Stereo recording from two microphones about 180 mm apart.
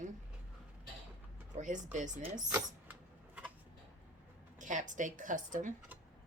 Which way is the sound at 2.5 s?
10° right (ahead or behind).